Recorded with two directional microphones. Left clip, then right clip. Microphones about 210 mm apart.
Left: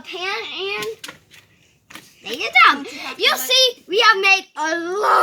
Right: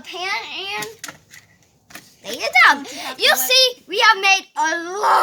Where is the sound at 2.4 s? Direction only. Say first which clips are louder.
Even; 50° right (ahead or behind).